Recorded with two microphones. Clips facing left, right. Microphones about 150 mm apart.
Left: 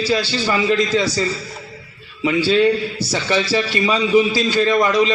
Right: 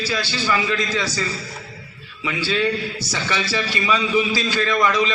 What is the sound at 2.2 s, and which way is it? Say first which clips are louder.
A man's voice: left 7 dB; 30° left (ahead or behind).